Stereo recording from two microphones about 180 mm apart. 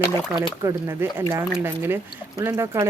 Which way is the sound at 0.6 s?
15° right (ahead or behind).